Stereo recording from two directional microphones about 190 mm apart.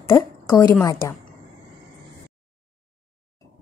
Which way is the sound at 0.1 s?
10° left (ahead or behind).